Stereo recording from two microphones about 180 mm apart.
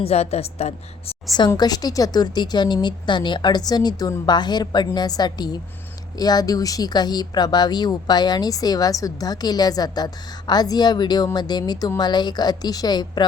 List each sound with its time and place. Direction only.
0.0 s a woman's voice: 35° left (ahead or behind)
1.4 s speech: 20° left (ahead or behind)